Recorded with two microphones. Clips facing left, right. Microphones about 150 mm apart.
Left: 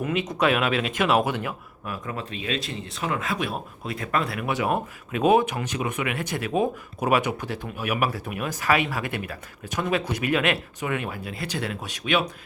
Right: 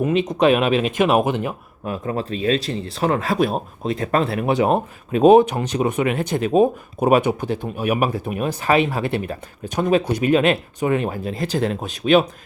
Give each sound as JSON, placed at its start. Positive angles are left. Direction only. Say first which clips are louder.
{"t": 0.0, "sound": "speech", "louder": "right 7 dB", "side_deg": -25}